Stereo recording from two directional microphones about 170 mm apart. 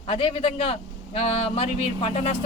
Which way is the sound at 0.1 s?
35° left (ahead or behind).